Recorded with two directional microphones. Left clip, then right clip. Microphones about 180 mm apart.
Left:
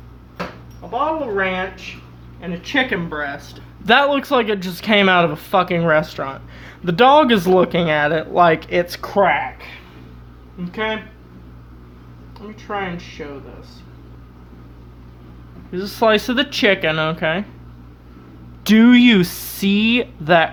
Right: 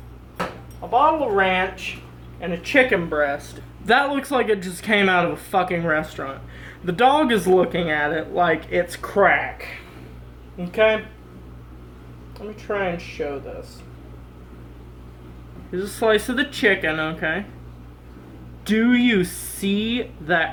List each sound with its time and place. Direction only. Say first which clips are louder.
0.9 s speech: right 3 dB; 15° left (ahead or behind); by 9.6 s 45° left (ahead or behind)
15.7 s speech: left 4 dB; 55° left (ahead or behind)
18.6 s speech: left 7 dB; 55° left (ahead or behind)